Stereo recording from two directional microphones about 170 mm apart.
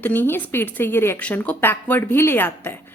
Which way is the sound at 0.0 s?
10° left (ahead or behind).